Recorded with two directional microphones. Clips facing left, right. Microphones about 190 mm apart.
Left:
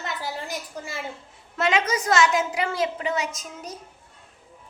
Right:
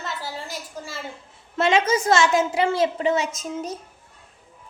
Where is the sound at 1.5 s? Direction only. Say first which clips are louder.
Right 4 dB; 30° right (ahead or behind).